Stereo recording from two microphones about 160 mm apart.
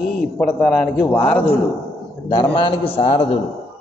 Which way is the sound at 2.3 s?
30° left (ahead or behind).